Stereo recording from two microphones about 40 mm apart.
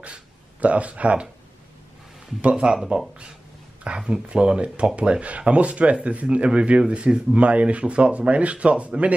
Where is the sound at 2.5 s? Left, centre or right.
Right.